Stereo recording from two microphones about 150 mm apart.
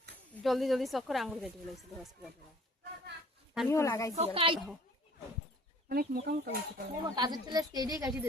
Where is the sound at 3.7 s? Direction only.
20° left (ahead or behind).